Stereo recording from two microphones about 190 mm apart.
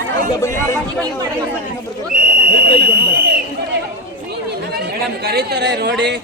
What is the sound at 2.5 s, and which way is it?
Fire alarm, 50° right (ahead or behind).